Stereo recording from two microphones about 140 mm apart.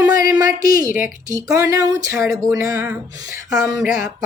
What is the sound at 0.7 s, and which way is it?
Speech, 75° left (ahead or behind).